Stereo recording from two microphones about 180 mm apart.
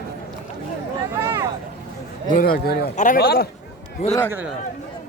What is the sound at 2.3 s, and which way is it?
A man's voice, 55° left (ahead or behind).